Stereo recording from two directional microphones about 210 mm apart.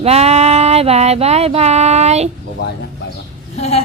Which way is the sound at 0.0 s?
30° right (ahead or behind).